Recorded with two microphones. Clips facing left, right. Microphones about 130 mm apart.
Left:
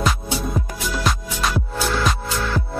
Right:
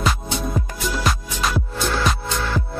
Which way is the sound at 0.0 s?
Centre (ahead or behind).